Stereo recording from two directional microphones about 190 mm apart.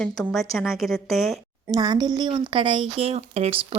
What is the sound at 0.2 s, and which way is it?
A woman's voice, centre (ahead or behind).